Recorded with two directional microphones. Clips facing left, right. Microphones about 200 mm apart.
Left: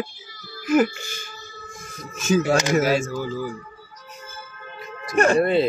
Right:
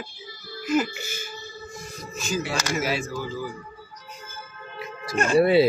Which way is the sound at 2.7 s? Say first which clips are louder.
Left 7 dB; 45° left (ahead or behind).